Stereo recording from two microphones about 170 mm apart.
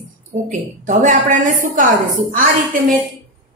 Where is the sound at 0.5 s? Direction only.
50° right (ahead or behind).